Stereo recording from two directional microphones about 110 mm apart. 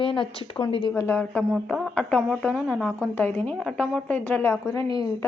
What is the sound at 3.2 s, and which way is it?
Speech, 20° left (ahead or behind).